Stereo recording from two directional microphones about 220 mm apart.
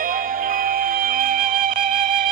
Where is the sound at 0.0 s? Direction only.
40° right (ahead or behind).